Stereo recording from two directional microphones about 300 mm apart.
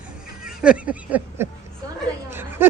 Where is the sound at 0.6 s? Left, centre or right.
Centre.